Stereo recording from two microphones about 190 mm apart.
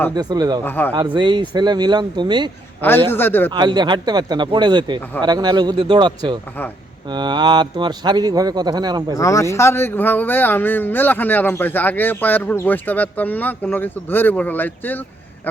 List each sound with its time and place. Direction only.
0.1 s speech: 20° right (ahead or behind)
0.6 s speech: 10° left (ahead or behind)
0.9 s speech: 25° right (ahead or behind)
3.1 s speech: 10° left (ahead or behind)
3.5 s speech: 25° right (ahead or behind)
9.1 s speech: 15° left (ahead or behind)